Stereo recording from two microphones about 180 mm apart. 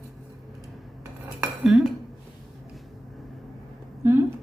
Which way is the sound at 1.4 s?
5° right (ahead or behind).